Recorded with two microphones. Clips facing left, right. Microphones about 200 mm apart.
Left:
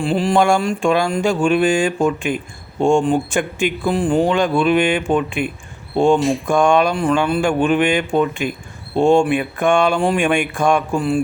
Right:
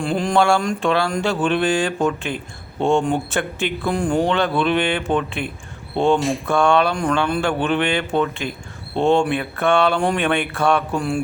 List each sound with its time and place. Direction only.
0.0 s speech: 5° left (ahead or behind)
0.3 s speech: 15° left (ahead or behind)
6.1 s speech: centre (ahead or behind)
6.4 s speech: 15° left (ahead or behind)